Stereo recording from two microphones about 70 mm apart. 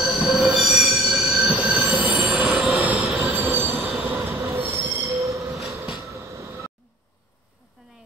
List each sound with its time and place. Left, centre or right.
0.0 s train: centre
0.5 s train wheels squealing: centre
1.7 s train wheels squealing: right
2.7 s train wheels squealing: right
3.8 s train: centre
4.1 s train wheels squealing: right
5.1 s train: right
6.0 s vehicle: right